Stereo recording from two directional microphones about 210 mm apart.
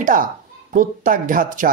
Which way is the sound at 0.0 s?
40° right (ahead or behind).